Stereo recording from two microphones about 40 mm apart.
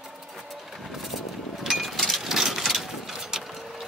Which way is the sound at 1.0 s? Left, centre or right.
Centre.